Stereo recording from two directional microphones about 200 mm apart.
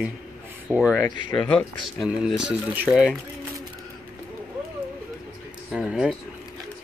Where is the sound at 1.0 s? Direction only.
25° left (ahead or behind).